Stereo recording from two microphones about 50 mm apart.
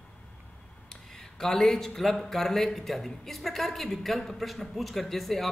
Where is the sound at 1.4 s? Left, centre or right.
Centre.